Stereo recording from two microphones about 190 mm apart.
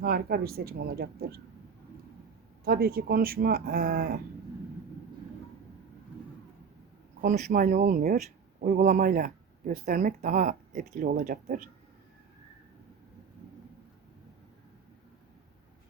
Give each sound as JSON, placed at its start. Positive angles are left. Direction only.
{"t": 0.0, "sound": "speech", "side_deg": -55}
{"t": 2.6, "sound": "speech", "side_deg": -55}
{"t": 7.2, "sound": "speech", "side_deg": -40}